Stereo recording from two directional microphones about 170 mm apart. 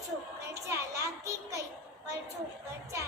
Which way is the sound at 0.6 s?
20° right (ahead or behind).